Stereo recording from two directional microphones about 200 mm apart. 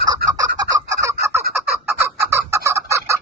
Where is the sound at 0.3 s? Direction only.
15° right (ahead or behind).